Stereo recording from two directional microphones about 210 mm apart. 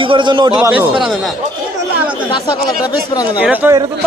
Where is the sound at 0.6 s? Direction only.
10° right (ahead or behind).